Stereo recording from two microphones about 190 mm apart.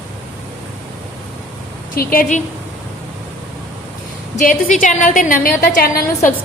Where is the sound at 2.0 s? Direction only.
50° left (ahead or behind).